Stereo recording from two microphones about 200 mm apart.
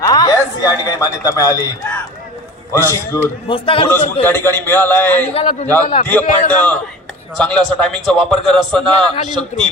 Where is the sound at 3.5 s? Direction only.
25° left (ahead or behind).